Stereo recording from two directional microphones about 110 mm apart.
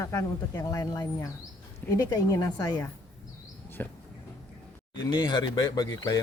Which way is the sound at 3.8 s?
20° left (ahead or behind).